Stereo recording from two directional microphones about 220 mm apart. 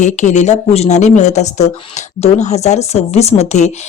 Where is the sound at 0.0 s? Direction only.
35° left (ahead or behind).